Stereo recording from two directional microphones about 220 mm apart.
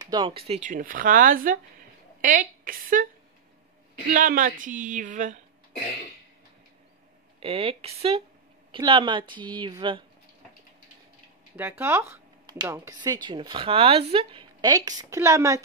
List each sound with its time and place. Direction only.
0.0 s speech: 20° right (ahead or behind); by 3.1 s 40° right (ahead or behind)
4.1 s speech: 40° right (ahead or behind)
7.3 s speech: 25° right (ahead or behind)
11.5 s a woman's voice: 10° right (ahead or behind)